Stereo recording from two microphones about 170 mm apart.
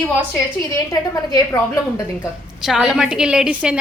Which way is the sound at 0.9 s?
20° left (ahead or behind).